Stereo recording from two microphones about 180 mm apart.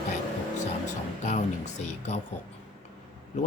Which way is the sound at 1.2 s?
40° left (ahead or behind).